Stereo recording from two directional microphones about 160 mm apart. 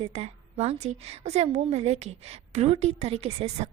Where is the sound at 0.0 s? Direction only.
40° right (ahead or behind).